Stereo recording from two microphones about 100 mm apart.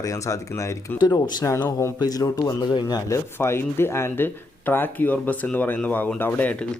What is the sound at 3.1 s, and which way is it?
Speech, 25° left (ahead or behind).